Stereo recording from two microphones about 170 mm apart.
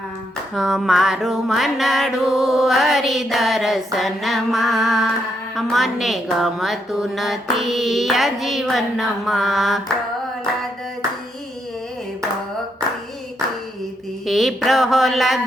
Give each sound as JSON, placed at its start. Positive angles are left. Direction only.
{"t": 0.5, "sound": "music", "side_deg": 0}
{"t": 14.3, "sound": "music", "side_deg": 0}